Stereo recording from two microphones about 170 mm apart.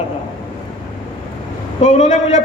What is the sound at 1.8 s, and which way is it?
Speech, 45° left (ahead or behind).